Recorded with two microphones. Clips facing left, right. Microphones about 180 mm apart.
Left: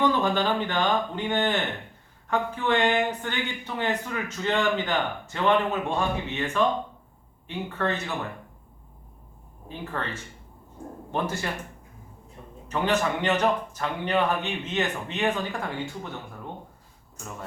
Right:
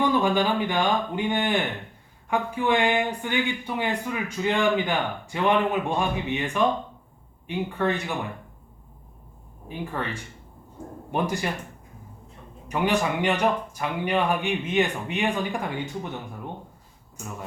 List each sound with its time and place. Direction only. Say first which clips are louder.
0.0 s speech: right 2 dB; 10° right (ahead or behind)
9.6 s speech: right 2 dB; 15° right (ahead or behind)
12.6 s speech: right 1 dB; 15° right (ahead or behind)